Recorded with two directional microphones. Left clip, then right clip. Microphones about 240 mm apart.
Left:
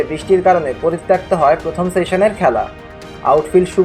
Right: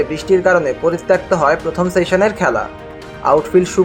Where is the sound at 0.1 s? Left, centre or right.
Centre.